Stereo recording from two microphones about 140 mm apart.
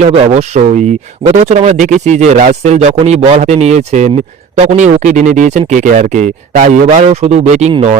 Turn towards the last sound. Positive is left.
turn(degrees=-55)  # may be behind; listen again after turning